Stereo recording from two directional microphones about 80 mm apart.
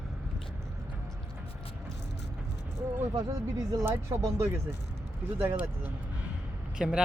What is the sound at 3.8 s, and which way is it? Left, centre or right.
Speech, right.